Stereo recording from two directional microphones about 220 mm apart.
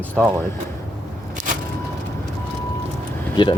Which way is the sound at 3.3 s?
20° left (ahead or behind).